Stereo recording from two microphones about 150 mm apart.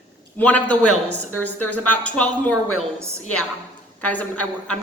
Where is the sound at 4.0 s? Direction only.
10° left (ahead or behind).